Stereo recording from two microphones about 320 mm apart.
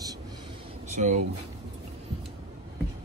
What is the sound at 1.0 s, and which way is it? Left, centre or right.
Speech, right.